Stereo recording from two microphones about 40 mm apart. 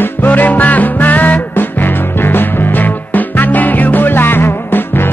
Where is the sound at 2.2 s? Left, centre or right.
Left.